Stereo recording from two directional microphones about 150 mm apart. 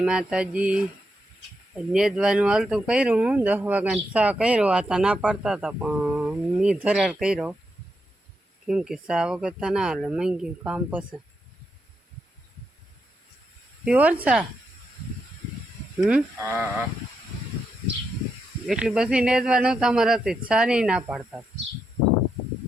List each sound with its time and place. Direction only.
0.0 s speech: 5° right (ahead or behind)
8.6 s speech: 5° right (ahead or behind)
13.8 s speech: 10° right (ahead or behind)
16.0 s speech: 5° right (ahead or behind)
16.4 s speech: 20° right (ahead or behind)
18.6 s speech: centre (ahead or behind)